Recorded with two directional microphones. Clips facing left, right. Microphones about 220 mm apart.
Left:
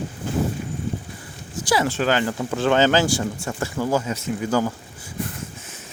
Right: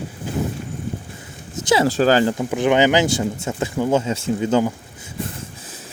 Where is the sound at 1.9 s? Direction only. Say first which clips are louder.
Right 6 dB; 35° right (ahead or behind).